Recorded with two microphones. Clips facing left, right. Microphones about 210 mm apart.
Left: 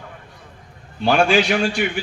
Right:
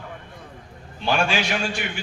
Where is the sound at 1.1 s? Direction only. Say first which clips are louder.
Left 7 dB; 55° left (ahead or behind).